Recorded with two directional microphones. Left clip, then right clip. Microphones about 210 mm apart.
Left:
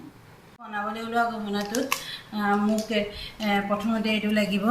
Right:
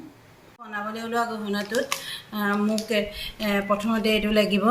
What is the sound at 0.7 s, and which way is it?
Speech, 55° right (ahead or behind).